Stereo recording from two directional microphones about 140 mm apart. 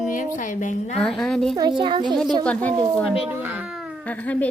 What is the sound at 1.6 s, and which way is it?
Speech, 35° right (ahead or behind).